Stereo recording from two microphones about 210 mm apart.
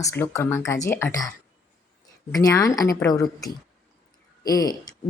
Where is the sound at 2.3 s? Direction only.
15° left (ahead or behind).